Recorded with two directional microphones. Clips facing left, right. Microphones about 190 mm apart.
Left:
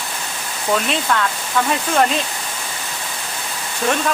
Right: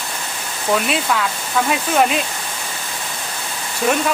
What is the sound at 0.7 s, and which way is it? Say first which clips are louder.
Speech: right 1 dB; 5° right (ahead or behind).